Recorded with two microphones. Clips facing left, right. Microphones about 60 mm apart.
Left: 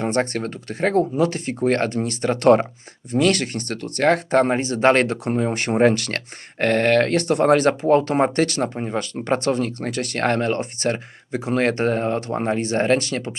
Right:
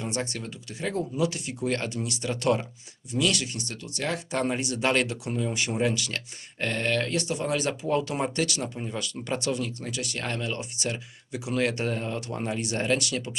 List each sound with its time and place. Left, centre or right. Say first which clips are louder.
0.0 s speech: left 10 dB; left